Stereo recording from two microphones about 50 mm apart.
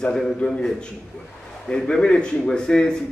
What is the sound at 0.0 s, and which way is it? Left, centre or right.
A man's voice, centre.